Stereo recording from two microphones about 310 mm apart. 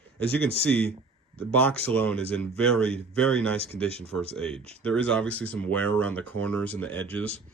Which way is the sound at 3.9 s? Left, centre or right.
Centre.